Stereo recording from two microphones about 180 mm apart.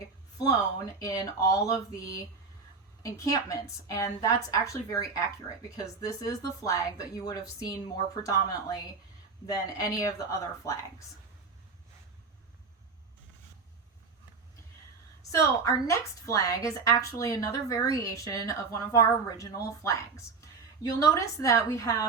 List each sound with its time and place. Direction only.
0.9 s a woman's voice: 20° left (ahead or behind)
15.2 s a woman's voice: 20° left (ahead or behind)